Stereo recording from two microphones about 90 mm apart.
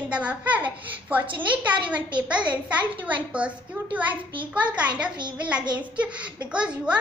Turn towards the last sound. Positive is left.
turn(degrees=-10)  # may be behind; listen again after turning